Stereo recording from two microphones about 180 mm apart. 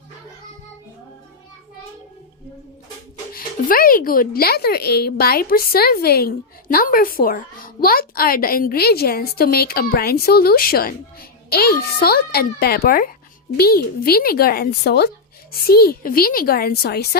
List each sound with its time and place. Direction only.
3.3 s speech: 55° left (ahead or behind)